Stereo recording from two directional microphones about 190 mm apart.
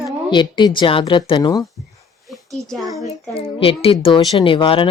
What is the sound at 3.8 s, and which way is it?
Speech, 25° left (ahead or behind).